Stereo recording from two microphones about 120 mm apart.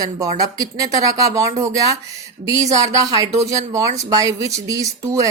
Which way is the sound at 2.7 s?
30° right (ahead or behind).